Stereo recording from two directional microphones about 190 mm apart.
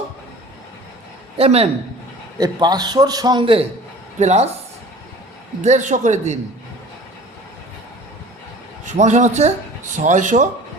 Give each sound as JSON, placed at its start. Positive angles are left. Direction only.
{"t": 1.4, "sound": "a man's voice", "side_deg": -35}
{"t": 2.4, "sound": "a man's voice", "side_deg": -20}
{"t": 5.6, "sound": "a man's voice", "side_deg": -40}
{"t": 8.8, "sound": "a man's voice", "side_deg": -40}